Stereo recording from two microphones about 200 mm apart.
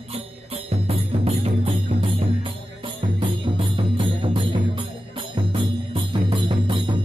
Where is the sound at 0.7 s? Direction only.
30° right (ahead or behind).